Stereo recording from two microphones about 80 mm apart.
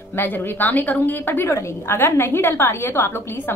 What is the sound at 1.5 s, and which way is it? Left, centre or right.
A woman's voice, left.